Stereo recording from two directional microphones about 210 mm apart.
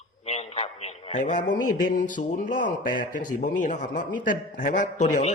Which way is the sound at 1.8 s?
40° left (ahead or behind).